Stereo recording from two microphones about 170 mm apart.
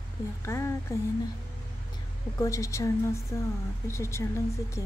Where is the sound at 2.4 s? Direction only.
20° left (ahead or behind).